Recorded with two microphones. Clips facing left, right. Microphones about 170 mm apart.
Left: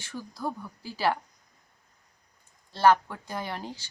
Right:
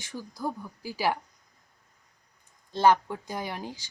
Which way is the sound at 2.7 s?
15° right (ahead or behind).